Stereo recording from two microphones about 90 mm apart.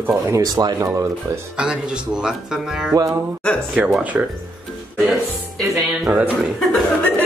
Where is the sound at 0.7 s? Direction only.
35° right (ahead or behind).